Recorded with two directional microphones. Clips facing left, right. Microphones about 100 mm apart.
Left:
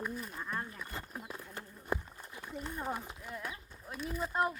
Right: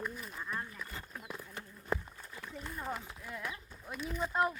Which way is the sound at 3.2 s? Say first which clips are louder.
Even; 20° left (ahead or behind).